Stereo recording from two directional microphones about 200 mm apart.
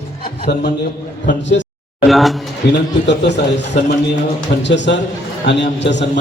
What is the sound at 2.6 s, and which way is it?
A man's voice, 55° left (ahead or behind).